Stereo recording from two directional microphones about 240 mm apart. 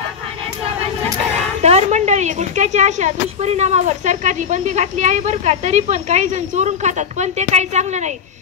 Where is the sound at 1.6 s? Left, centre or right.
Right.